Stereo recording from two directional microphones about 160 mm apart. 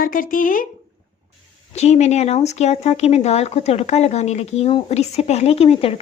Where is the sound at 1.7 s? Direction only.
45° left (ahead or behind).